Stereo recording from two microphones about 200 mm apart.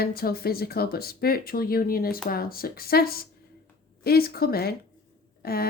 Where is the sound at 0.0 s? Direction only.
50° left (ahead or behind).